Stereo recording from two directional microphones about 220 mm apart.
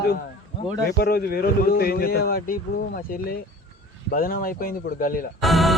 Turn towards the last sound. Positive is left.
turn(degrees=0)  # may be behind; listen again after turning